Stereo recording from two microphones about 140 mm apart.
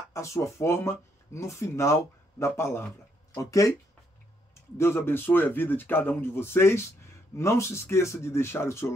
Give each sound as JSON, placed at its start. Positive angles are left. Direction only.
{"t": 0.1, "sound": "speech", "side_deg": 20}
{"t": 4.7, "sound": "speech", "side_deg": 15}